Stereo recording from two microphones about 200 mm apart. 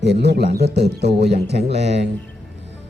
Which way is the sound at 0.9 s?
55° right (ahead or behind).